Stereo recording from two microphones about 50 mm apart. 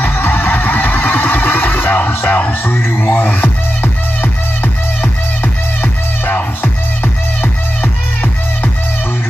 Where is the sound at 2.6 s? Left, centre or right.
Left.